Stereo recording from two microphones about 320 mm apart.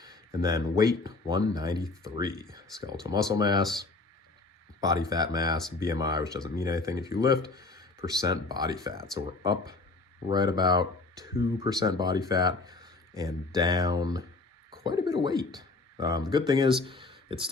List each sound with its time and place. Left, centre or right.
0.0 s speech: centre
4.8 s speech: centre
16.8 s a sound: centre